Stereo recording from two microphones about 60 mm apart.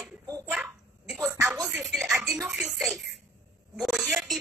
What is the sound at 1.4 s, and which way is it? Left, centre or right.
A woman's voice, centre.